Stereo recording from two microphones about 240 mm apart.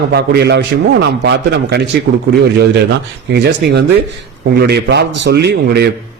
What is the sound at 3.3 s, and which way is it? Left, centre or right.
A man's voice, right.